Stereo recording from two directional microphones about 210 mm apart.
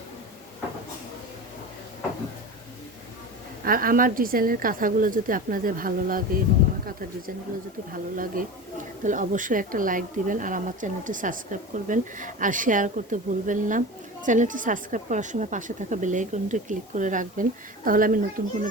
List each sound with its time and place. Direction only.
3.6 s speech: 45° right (ahead or behind)
8.1 s speech: 40° right (ahead or behind)